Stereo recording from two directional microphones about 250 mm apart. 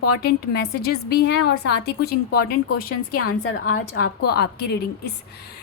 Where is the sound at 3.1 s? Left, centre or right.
Left.